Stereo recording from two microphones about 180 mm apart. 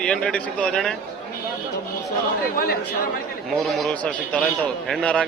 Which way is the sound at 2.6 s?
60° left (ahead or behind).